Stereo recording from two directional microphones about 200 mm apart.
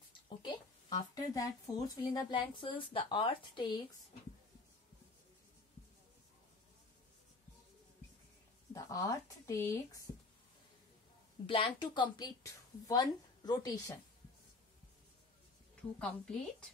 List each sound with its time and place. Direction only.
0.4 s speech: 20° left (ahead or behind)
8.7 s speech: 15° left (ahead or behind)
11.4 s a woman's voice: 25° left (ahead or behind)
16.0 s a woman's voice: 5° left (ahead or behind)